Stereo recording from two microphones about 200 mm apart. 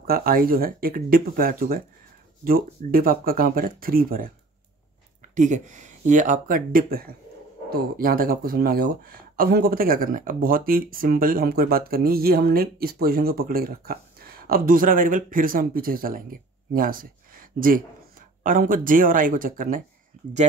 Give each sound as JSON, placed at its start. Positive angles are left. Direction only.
{"t": 0.0, "sound": "speech", "side_deg": -45}
{"t": 5.3, "sound": "speech", "side_deg": -40}